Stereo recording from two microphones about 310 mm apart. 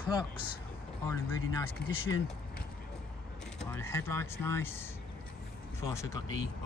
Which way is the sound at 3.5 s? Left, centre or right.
Centre.